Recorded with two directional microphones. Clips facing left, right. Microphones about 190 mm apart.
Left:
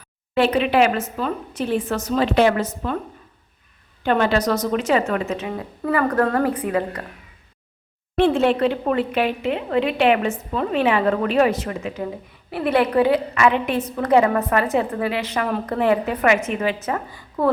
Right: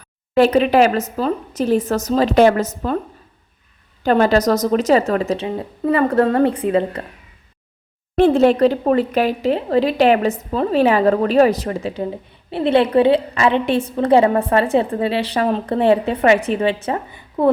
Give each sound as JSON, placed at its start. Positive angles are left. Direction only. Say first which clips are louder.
{"t": 0.3, "sound": "speech", "louder": "right 4 dB", "side_deg": -40}
{"t": 4.0, "sound": "speech", "louder": "right 4 dB", "side_deg": -40}
{"t": 8.1, "sound": "a woman's voice", "louder": "right 4 dB", "side_deg": -40}